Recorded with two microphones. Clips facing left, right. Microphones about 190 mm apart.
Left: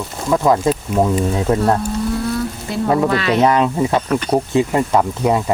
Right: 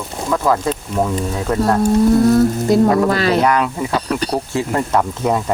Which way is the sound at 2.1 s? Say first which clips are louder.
Right 9 dB; 40° right (ahead or behind).